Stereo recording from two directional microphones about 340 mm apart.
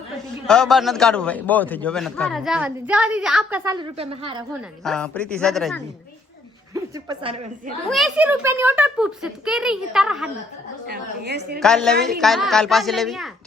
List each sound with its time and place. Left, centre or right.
0.4 s a man's voice: centre
4.8 s a man's voice: centre
6.7 s speech: centre
7.9 s a man's voice: centre
10.8 s a woman's voice: right
11.6 s a man's voice: centre